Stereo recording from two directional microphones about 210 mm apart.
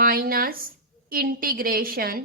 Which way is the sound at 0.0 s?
45° right (ahead or behind).